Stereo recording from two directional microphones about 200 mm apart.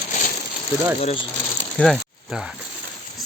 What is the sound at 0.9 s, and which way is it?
Speech, 30° left (ahead or behind).